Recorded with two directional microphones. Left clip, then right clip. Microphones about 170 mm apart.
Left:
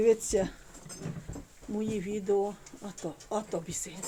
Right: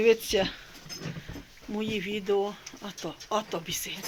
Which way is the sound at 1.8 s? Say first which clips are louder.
Right 2 dB; 5° left (ahead or behind).